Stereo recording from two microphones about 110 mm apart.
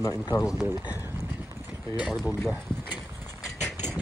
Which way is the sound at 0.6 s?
15° right (ahead or behind).